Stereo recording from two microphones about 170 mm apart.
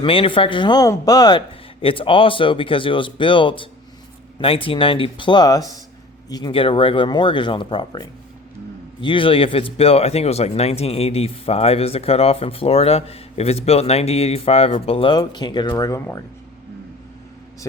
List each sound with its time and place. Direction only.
0.0 s a man's voice: 30° left (ahead or behind); by 16.2 s 15° left (ahead or behind)